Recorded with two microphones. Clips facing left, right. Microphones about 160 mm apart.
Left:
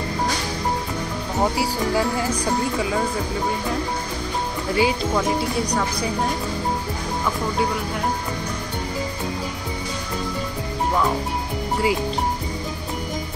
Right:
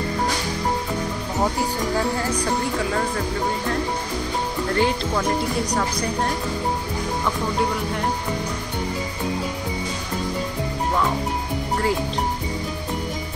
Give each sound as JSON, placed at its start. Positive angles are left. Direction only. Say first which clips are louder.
{"t": 1.4, "sound": "speech", "louder": "left 1 dB", "side_deg": 10}
{"t": 4.7, "sound": "a woman's voice", "louder": "left 2 dB", "side_deg": 5}